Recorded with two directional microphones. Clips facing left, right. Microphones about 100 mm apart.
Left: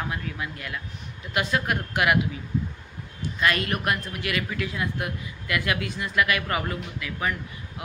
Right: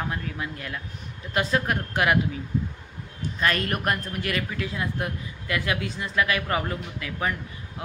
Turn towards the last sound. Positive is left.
turn(degrees=-30)  # may be behind; listen again after turning